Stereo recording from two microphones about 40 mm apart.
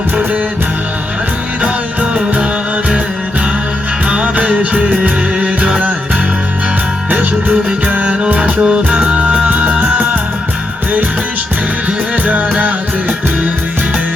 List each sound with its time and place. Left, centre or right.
4.1 s music: right
7.1 s music: right
7.9 s music: right
11.9 s music: right